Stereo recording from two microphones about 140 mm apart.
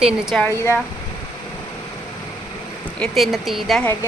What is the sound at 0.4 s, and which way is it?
Speech, 20° left (ahead or behind).